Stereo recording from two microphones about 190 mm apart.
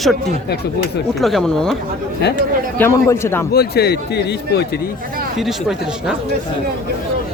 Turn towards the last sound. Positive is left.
turn(degrees=0)  # may be behind; listen again after turning